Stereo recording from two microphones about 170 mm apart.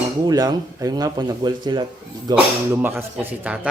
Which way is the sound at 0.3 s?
20° right (ahead or behind).